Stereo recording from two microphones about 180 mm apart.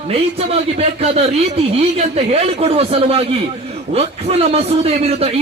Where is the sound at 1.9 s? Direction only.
35° right (ahead or behind).